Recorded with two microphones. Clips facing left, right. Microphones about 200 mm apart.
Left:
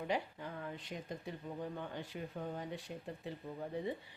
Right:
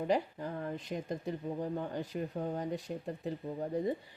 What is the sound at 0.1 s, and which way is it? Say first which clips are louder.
Speech: right 6 dB; 40° right (ahead or behind).